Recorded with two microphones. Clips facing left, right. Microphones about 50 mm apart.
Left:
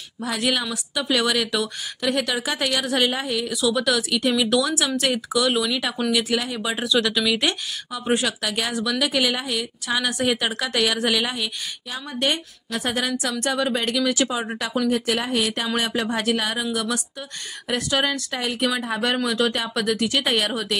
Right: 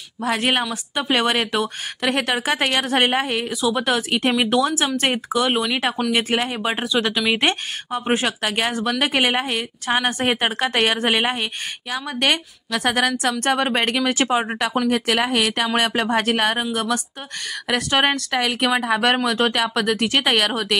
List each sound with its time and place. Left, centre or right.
0.2 s a woman's voice: right
2.0 s a woman's voice: right
3.6 s speech: right
6.8 s speech: right
7.2 s a woman's voice: right
11.9 s a woman's voice: right
17.9 s a woman's voice: right